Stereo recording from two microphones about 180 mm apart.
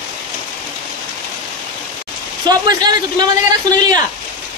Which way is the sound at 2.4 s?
25° right (ahead or behind).